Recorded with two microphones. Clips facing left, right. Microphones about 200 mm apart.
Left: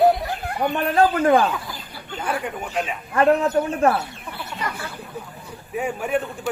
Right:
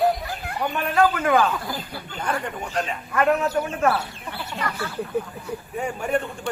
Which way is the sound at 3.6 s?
35° left (ahead or behind).